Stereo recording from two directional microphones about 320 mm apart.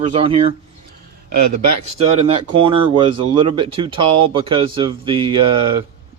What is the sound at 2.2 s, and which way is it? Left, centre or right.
Speech, centre.